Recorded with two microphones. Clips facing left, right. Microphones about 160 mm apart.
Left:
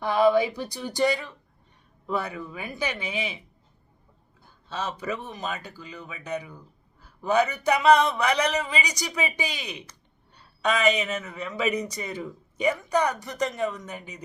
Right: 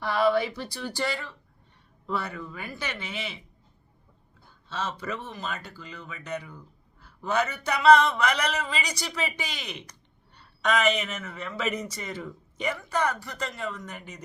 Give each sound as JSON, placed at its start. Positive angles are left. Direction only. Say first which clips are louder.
{"t": 0.0, "sound": "speech", "louder": "left 3 dB", "side_deg": 15}
{"t": 4.7, "sound": "speech", "louder": "left 2 dB", "side_deg": 10}